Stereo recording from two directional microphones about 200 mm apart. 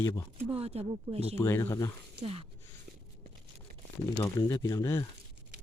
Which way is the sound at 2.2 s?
30° right (ahead or behind).